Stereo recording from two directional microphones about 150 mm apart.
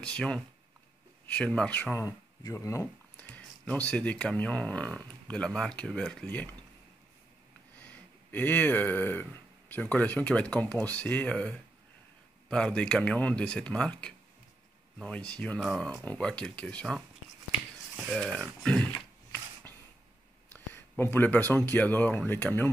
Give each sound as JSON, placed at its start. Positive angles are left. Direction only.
{"t": 0.0, "sound": "speech", "side_deg": 5}
{"t": 2.0, "sound": "speech", "side_deg": 20}
{"t": 3.2, "sound": "speech", "side_deg": 10}
{"t": 7.8, "sound": "speech", "side_deg": 10}
{"t": 18.1, "sound": "speech", "side_deg": 0}
{"t": 20.4, "sound": "speech", "side_deg": 15}